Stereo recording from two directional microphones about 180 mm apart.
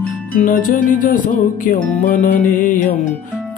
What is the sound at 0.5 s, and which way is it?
Music, 45° left (ahead or behind).